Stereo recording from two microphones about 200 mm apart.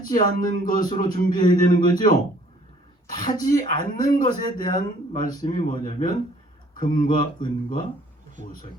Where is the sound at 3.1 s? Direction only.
40° left (ahead or behind).